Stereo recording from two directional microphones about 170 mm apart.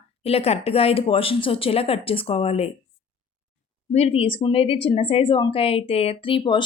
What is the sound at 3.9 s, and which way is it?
Speech, 35° left (ahead or behind).